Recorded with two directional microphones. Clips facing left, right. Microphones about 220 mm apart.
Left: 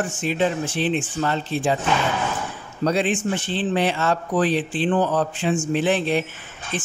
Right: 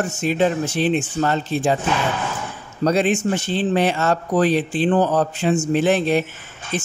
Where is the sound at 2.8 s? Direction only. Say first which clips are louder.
Right 3 dB; 45° right (ahead or behind).